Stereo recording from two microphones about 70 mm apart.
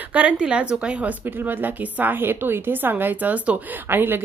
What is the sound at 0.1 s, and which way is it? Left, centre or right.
Speech, centre.